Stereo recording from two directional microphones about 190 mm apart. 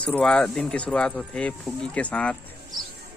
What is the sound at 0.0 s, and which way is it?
Speech, 5° left (ahead or behind).